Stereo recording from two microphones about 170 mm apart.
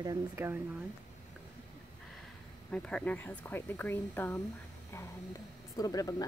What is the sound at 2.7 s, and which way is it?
Speech, 5° left (ahead or behind).